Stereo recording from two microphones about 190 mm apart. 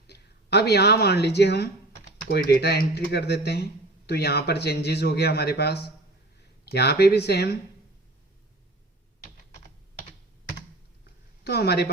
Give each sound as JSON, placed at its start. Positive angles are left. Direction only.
{"t": 0.1, "sound": "speech", "side_deg": 60}
{"t": 11.4, "sound": "speech", "side_deg": 60}